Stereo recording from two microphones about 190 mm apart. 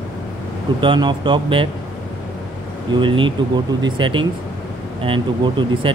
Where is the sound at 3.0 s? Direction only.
25° right (ahead or behind).